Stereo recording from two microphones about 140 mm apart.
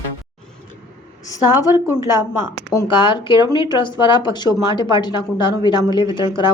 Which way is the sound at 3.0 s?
35° left (ahead or behind).